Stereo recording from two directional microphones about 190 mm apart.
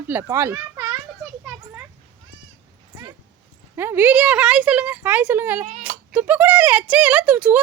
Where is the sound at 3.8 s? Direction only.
10° right (ahead or behind).